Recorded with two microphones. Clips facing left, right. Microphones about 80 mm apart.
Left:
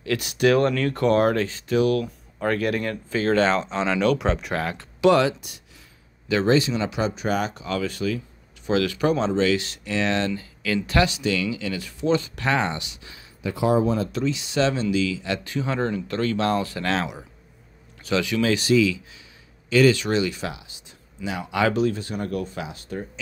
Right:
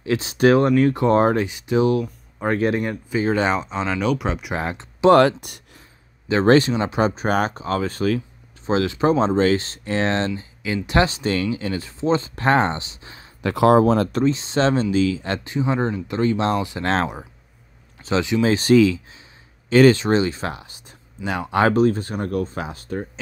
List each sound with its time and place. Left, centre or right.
0.0 s speech: right
0.6 s speech: centre
4.6 s speech: right
5.1 s speech: right
6.7 s speech: right
8.6 s speech: right
9.3 s speech: right
11.1 s speech: right
13.4 s speech: right
14.1 s speech: right
15.4 s speech: right
16.8 s speech: right
18.0 s speech: right
18.6 s speech: right